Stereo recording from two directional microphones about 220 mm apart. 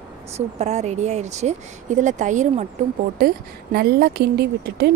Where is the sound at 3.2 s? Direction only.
45° right (ahead or behind).